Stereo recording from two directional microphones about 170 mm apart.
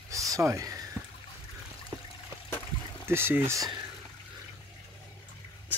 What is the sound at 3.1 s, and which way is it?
Speech, 15° right (ahead or behind).